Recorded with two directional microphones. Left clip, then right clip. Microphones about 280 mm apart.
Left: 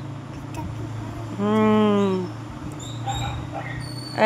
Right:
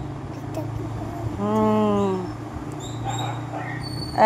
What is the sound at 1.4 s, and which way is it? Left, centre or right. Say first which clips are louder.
Vehicle: left 1 dB; left.